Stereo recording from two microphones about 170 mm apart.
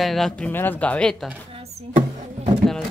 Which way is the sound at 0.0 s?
Centre (ahead or behind).